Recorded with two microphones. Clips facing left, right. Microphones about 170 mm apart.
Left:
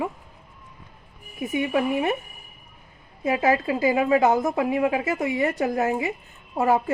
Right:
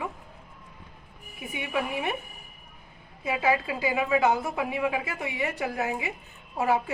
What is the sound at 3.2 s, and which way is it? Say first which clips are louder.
A woman's voice: left 5 dB; 40° left (ahead or behind).